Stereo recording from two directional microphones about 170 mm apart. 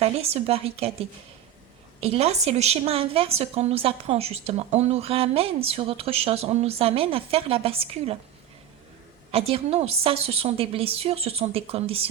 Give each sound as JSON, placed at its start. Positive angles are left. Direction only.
{"t": 0.0, "sound": "a woman's voice", "side_deg": -35}
{"t": 9.3, "sound": "a woman's voice", "side_deg": -35}